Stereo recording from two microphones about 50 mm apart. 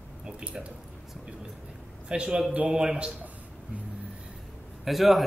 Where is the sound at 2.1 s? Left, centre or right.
Centre.